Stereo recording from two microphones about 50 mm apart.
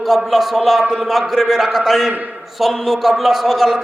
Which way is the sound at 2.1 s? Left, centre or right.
Right.